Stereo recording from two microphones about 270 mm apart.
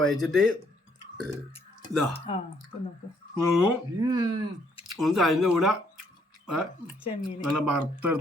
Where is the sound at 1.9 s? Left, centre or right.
Centre.